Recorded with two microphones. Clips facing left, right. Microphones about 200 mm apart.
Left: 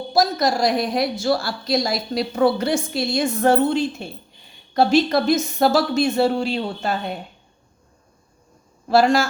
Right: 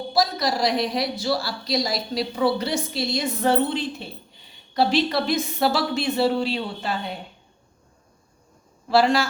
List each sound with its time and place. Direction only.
0.1 s a woman's voice: 45° left (ahead or behind)
8.9 s a woman's voice: 45° left (ahead or behind)